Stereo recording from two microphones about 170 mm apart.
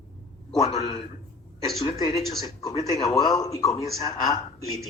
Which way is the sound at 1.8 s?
25° left (ahead or behind).